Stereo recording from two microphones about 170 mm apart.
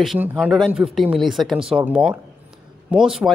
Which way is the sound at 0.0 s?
5° right (ahead or behind).